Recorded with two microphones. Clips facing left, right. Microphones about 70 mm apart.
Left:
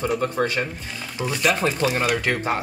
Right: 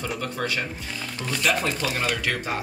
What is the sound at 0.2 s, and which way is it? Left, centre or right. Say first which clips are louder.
Speech: left 5 dB; left.